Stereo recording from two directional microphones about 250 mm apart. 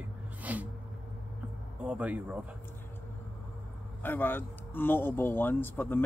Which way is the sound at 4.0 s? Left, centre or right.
Centre.